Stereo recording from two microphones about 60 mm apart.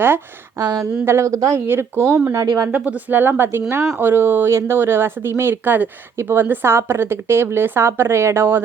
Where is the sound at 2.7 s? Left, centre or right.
Right.